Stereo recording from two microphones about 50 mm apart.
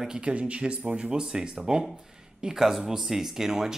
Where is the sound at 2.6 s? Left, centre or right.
Centre.